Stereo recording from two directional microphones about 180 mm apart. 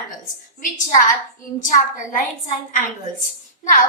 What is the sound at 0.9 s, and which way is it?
A woman's voice, 45° left (ahead or behind).